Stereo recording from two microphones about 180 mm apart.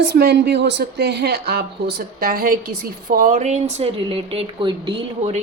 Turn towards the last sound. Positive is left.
turn(degrees=-35)  # may be behind; listen again after turning